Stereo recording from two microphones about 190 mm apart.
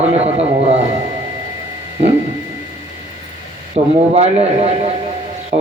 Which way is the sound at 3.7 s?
35° right (ahead or behind).